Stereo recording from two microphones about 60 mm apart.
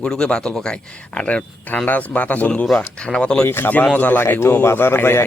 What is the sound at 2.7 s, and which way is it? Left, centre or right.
Speech, centre.